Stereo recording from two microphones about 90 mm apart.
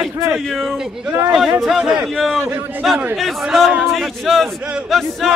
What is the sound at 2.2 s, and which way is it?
A man's voice, 5° left (ahead or behind).